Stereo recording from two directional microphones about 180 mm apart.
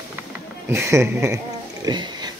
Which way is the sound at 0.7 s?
15° right (ahead or behind).